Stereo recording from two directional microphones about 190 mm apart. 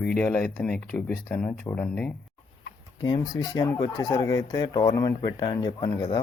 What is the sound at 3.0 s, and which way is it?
Speech, 20° left (ahead or behind).